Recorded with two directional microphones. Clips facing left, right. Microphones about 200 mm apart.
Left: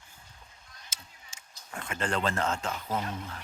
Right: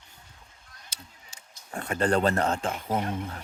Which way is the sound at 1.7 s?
40° right (ahead or behind).